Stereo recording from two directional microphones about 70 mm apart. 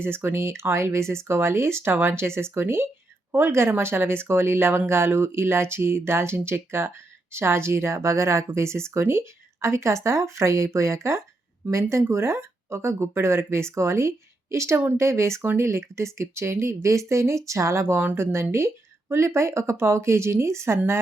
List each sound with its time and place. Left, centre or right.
0.0 s speech: right
17.9 s speech: right